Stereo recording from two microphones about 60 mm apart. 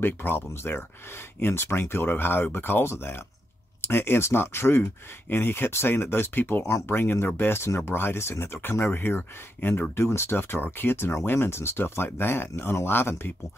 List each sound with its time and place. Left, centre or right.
0.0 s speech: left